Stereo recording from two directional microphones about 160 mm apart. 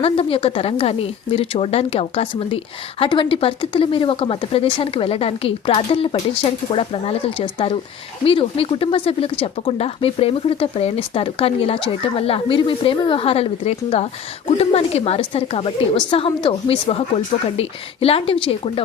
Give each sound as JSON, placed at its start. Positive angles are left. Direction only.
{"t": 0.0, "sound": "speech", "side_deg": 35}